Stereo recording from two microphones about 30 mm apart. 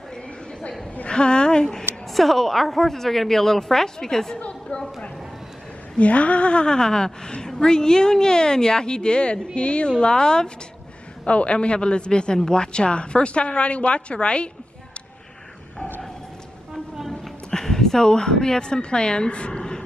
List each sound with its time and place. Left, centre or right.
1.0 s a sound: left
1.6 s a woman's voice: centre
2.1 s a woman's voice: centre
4.4 s chatter: left
5.9 s a woman's voice: left
11.2 s a woman's voice: left
17.5 s speech: centre; by 19.6 s left